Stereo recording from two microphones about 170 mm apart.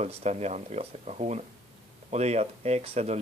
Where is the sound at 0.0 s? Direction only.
40° right (ahead or behind).